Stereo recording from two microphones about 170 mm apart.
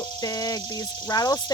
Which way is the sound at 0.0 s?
25° left (ahead or behind).